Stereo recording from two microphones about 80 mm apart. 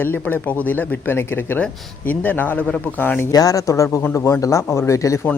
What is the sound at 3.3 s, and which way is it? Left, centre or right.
Speech, left.